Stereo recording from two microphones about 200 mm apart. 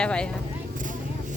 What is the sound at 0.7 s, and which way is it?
Vehicle, 40° right (ahead or behind).